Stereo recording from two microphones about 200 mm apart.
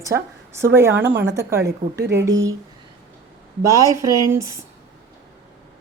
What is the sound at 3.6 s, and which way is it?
Speech, 15° right (ahead or behind).